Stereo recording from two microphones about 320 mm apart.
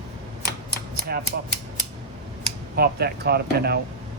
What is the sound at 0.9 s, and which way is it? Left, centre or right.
Typewriter, right.